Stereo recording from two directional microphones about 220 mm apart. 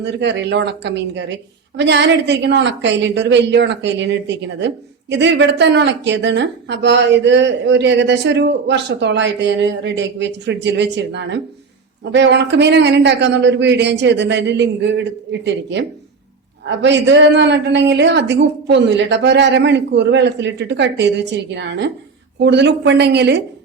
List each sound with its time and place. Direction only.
0.0 s a woman's voice: 55° right (ahead or behind)